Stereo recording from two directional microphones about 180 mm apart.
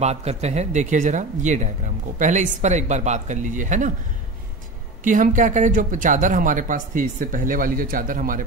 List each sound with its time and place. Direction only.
0.0 s speech: 35° right (ahead or behind)
5.0 s speech: 45° right (ahead or behind)